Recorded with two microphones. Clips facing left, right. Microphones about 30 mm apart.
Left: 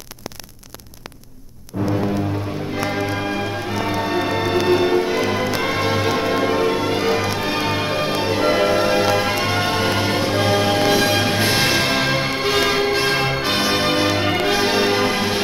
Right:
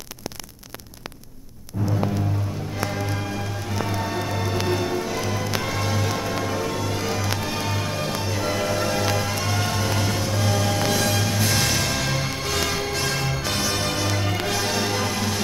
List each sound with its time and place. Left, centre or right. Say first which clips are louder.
1.7 s music: left 5 dB; left